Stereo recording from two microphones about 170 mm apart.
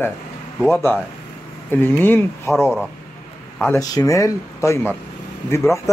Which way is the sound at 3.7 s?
20° left (ahead or behind).